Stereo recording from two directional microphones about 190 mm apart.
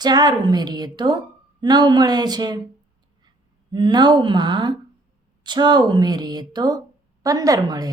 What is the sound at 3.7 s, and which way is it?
Speech, 25° right (ahead or behind).